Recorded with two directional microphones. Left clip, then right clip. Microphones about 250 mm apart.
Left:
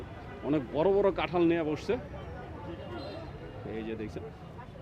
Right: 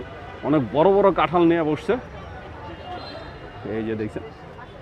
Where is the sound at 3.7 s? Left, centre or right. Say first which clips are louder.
Right 11 dB; right.